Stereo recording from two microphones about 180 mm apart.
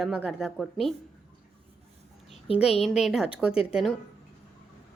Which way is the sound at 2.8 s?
Centre (ahead or behind).